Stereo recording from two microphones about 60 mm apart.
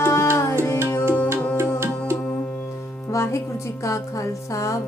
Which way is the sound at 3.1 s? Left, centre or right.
Left.